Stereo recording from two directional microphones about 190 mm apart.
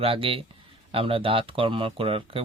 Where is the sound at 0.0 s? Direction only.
30° right (ahead or behind).